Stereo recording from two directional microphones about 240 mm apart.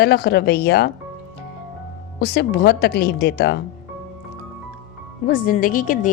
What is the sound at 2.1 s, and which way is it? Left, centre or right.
A woman's voice, left.